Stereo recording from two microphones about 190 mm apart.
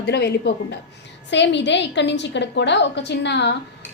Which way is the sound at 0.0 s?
60° left (ahead or behind).